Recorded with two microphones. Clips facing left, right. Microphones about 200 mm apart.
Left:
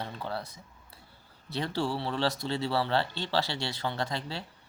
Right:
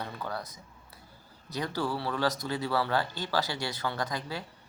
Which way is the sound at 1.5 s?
25° left (ahead or behind).